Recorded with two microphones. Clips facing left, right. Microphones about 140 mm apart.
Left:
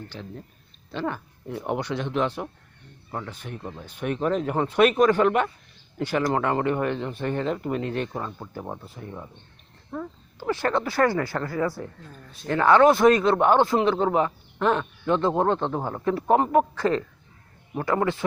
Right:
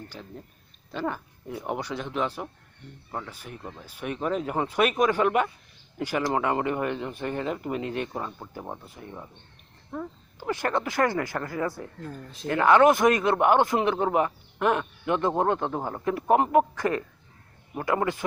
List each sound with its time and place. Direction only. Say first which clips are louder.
0.1 s speech: left 3 dB; 5° right (ahead or behind)
3.6 s speech: left 4 dB; 5° left (ahead or behind)
3.8 s speech: left 4 dB; 5° right (ahead or behind)
9.9 s speech: left 1 dB; 10° right (ahead or behind)
16.3 s speech: even; 15° right (ahead or behind)